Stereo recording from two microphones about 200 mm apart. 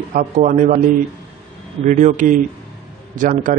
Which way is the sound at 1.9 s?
40° right (ahead or behind).